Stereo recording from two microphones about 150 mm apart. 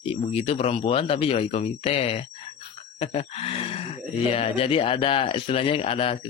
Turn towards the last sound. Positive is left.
turn(degrees=40)  # may be behind; listen again after turning